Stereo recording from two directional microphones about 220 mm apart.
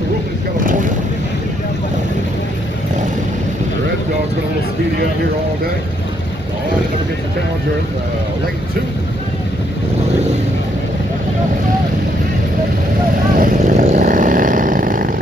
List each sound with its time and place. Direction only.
13.4 s vehicle: 35° right (ahead or behind)